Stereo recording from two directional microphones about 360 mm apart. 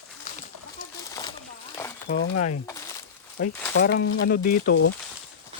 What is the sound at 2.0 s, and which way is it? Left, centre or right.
Speech, left.